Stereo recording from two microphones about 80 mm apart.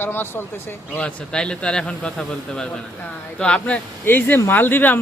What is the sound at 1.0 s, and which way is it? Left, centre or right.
Speech, centre.